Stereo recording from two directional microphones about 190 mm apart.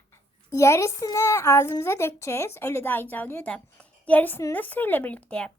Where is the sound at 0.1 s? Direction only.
15° left (ahead or behind).